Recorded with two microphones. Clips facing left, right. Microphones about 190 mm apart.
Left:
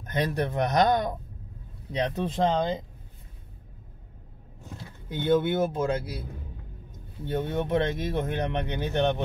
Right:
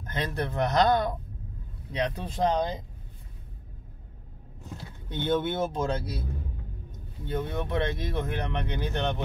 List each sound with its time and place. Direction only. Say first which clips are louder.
0.0 s speech: left 4 dB; 15° left (ahead or behind)
5.1 s speech: left 4 dB; 5° left (ahead or behind)
7.3 s speech: left 3 dB; 20° left (ahead or behind)